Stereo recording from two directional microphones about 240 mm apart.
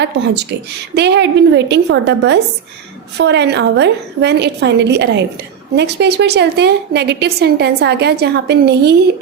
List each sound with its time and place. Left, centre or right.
0.0 s a woman's voice: right